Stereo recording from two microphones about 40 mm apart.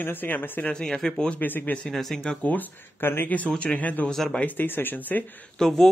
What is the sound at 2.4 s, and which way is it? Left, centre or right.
Speech, left.